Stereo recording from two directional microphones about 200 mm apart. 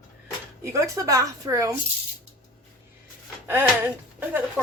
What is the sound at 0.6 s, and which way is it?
Speech, 15° right (ahead or behind).